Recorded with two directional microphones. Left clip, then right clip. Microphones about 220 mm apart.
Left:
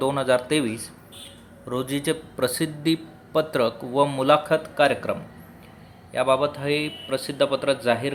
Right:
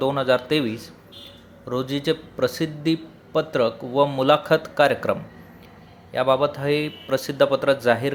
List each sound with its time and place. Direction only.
0.0 s speech: 5° right (ahead or behind)
6.1 s speech: 10° right (ahead or behind)